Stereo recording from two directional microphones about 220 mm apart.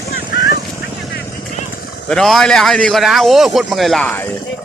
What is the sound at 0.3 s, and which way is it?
Vehicle, 15° right (ahead or behind).